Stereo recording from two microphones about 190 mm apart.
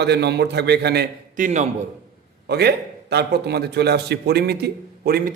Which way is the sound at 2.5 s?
60° right (ahead or behind).